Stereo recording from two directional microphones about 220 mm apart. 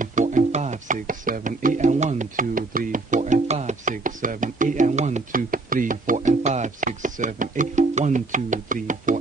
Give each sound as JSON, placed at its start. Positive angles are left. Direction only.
{"t": 0.0, "sound": "music", "side_deg": -35}